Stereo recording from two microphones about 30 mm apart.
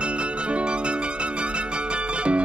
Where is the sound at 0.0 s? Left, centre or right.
Right.